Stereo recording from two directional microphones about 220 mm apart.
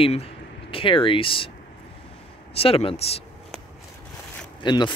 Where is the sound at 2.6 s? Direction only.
25° left (ahead or behind).